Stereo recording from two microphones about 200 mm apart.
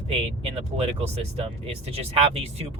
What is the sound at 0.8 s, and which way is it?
Speech, 30° right (ahead or behind).